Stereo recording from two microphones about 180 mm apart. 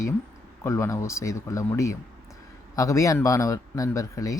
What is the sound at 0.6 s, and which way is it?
Speech, 15° left (ahead or behind).